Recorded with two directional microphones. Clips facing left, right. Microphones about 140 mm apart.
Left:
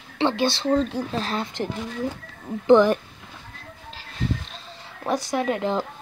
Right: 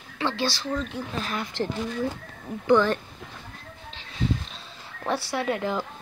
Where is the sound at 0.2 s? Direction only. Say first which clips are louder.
Left 5 dB; 20° left (ahead or behind).